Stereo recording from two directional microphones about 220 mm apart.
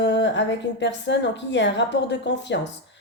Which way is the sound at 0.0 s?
50° left (ahead or behind).